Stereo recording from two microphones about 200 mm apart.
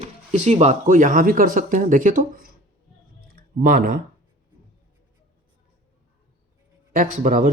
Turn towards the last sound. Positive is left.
turn(degrees=-45)  # may be behind; listen again after turning